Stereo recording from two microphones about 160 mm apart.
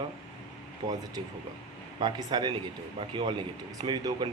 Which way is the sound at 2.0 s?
25° right (ahead or behind).